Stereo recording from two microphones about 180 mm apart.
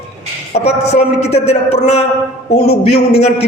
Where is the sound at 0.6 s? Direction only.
35° left (ahead or behind).